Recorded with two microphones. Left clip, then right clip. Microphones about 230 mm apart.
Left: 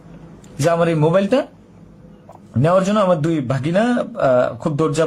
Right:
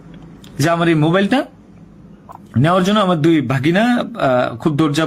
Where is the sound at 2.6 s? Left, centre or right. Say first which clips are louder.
Right 1 dB; centre.